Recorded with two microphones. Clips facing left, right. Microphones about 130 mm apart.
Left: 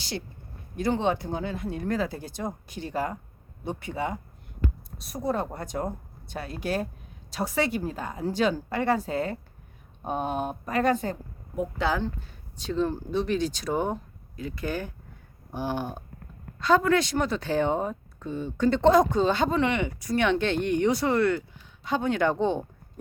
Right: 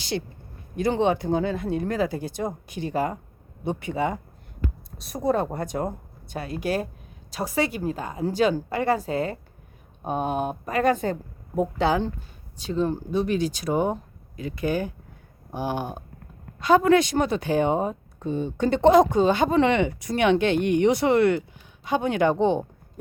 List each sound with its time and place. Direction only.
0.8 s speech: 15° right (ahead or behind)
12.5 s speech: 5° right (ahead or behind)
19.5 s speech: 30° right (ahead or behind)